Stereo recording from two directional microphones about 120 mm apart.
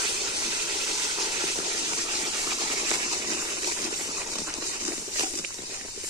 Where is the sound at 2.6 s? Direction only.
35° right (ahead or behind).